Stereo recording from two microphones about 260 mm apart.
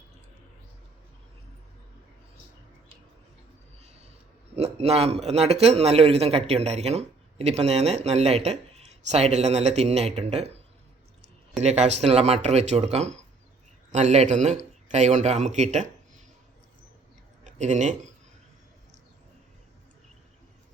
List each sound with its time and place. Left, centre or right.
4.5 s a man's voice: right
11.6 s a man's voice: right
17.4 s speech: right